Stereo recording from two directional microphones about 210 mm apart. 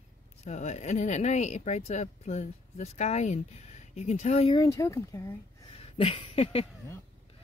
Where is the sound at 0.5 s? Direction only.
30° left (ahead or behind).